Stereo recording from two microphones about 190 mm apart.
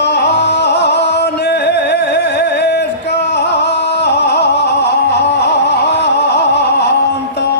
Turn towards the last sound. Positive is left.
turn(degrees=60)  # may be behind; listen again after turning